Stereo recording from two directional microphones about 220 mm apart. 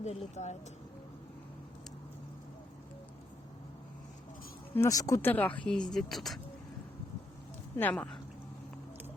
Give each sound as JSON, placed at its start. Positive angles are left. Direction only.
{"t": 0.0, "sound": "speech", "side_deg": 30}
{"t": 4.7, "sound": "speech", "side_deg": 15}
{"t": 7.8, "sound": "speech", "side_deg": 5}